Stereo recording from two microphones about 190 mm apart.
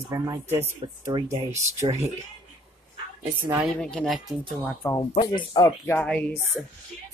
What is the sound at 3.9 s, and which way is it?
Speech, centre (ahead or behind).